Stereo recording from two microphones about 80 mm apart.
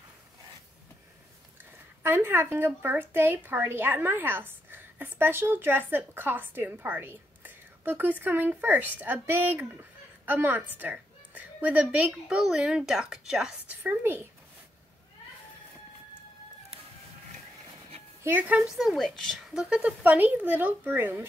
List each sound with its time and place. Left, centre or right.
1.6 s a woman's voice: right; by 13.6 s centre
13.7 s speech: right
18.4 s speech: centre
18.7 s speech: centre
18.9 s speech: centre
19.7 s speech: centre